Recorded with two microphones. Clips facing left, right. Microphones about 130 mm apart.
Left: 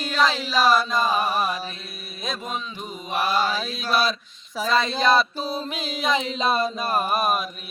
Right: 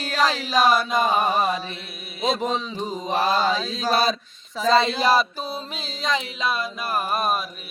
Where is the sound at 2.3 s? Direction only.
90° right.